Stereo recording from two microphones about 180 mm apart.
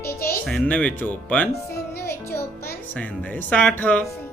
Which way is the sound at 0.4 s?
5° left (ahead or behind).